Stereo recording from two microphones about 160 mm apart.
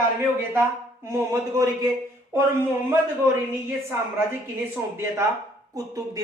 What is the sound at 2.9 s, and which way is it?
A man's voice, 15° right (ahead or behind).